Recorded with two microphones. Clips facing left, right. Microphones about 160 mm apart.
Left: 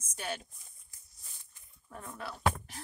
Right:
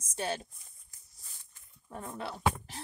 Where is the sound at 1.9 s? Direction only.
25° right (ahead or behind).